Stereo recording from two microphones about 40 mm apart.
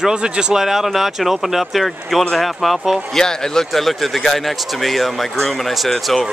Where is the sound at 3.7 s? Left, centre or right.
Centre.